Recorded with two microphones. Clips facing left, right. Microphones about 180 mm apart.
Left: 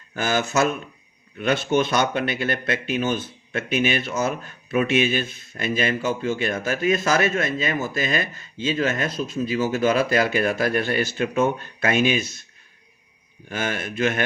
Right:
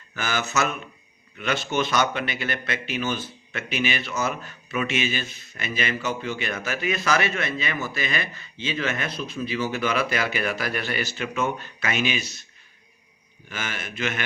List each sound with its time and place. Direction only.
0.2 s speech: 50° left (ahead or behind)
13.5 s speech: 50° left (ahead or behind)